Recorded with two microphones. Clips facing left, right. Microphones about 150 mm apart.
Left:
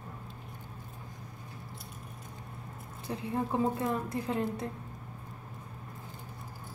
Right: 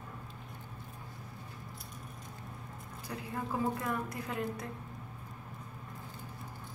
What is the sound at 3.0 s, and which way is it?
A woman's voice, 25° left (ahead or behind).